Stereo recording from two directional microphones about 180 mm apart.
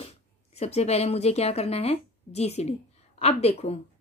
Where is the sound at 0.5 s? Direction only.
35° left (ahead or behind).